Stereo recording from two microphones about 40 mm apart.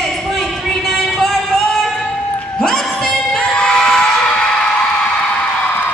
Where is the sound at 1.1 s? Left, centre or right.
Centre.